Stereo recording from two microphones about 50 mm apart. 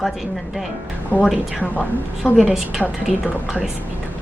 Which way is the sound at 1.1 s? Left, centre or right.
Right.